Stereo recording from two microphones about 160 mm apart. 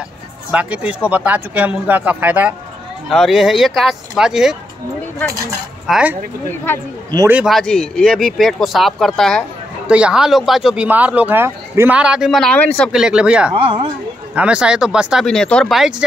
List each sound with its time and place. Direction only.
0.5 s speech: 10° right (ahead or behind)
3.1 s speech: centre (ahead or behind)
5.9 s speech: 5° right (ahead or behind)
6.6 s a man's voice: 15° left (ahead or behind)
7.2 s speech: 15° right (ahead or behind)
7.4 s speech: 5° left (ahead or behind)
12.9 s speech: 5° right (ahead or behind)
13.6 s speech: 35° right (ahead or behind)
14.3 s speech: 5° right (ahead or behind)